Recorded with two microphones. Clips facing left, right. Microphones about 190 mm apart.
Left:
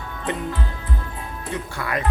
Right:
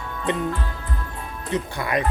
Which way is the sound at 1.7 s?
20° right (ahead or behind).